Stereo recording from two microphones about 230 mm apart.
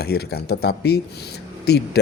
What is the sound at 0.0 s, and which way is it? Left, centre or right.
Speech, left.